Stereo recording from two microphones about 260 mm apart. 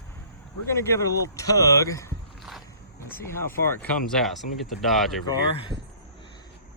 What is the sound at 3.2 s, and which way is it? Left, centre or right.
Speech, centre.